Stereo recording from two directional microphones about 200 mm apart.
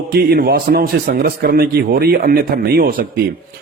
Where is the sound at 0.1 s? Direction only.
50° right (ahead or behind).